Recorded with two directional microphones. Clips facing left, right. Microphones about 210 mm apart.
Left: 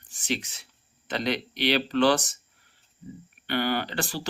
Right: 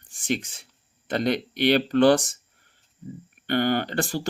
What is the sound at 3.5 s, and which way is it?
Speech, 45° right (ahead or behind).